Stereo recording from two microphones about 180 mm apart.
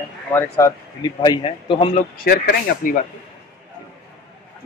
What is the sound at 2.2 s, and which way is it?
Speech, 55° left (ahead or behind).